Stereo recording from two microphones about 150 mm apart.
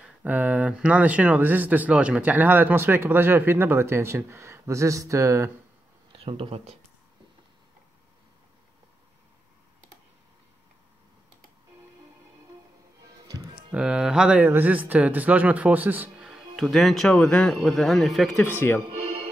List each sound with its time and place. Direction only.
0.0 s speech: 10° right (ahead or behind)
6.1 s speech: 40° right (ahead or behind)
13.7 s speech: 5° right (ahead or behind)